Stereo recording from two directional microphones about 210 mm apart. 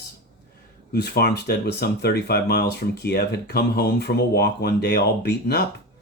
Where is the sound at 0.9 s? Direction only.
50° left (ahead or behind).